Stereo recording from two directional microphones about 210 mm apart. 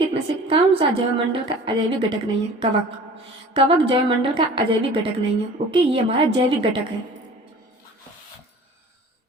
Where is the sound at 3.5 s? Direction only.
25° right (ahead or behind).